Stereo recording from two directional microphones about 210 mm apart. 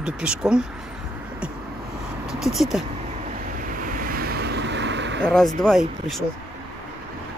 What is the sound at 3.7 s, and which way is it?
Waves, 40° right (ahead or behind).